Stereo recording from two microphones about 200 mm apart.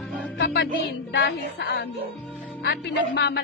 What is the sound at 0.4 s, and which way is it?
Music, 55° left (ahead or behind).